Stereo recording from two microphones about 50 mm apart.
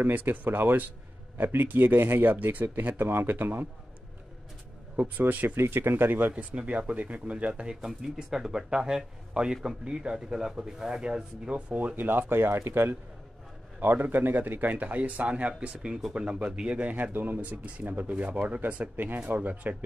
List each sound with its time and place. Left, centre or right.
0.0 s speech: right
2.3 s speech: right
4.9 s speech: right
5.6 s speech: right
6.3 s speech: right
7.8 s speech: centre
11.5 s speech: right
13.7 s speech: right
16.9 s speech: right
17.4 s speech: right